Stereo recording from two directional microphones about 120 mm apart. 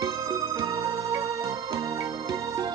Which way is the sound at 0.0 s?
30° right (ahead or behind).